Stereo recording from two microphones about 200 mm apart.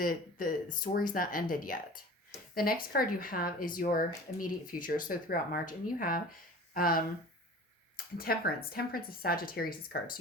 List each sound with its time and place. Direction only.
0.0 s speech: 45° left (ahead or behind)